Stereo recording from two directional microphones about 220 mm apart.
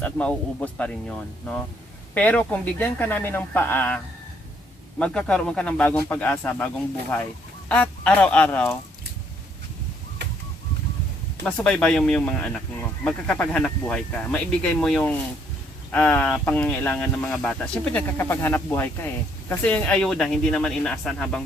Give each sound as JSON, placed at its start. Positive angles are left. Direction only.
{"t": 0.0, "sound": "speech", "side_deg": 5}
{"t": 7.7, "sound": "speech", "side_deg": 5}
{"t": 10.2, "sound": "a sound", "side_deg": -50}
{"t": 11.4, "sound": "speech", "side_deg": 5}